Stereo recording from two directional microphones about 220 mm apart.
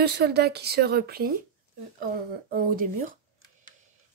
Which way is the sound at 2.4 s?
40° right (ahead or behind).